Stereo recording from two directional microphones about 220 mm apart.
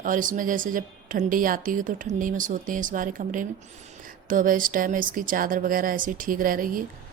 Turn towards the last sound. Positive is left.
turn(degrees=-40)  # may be behind; listen again after turning